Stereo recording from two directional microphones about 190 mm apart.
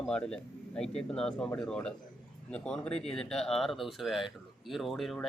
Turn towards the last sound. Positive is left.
turn(degrees=0)  # may be behind; listen again after turning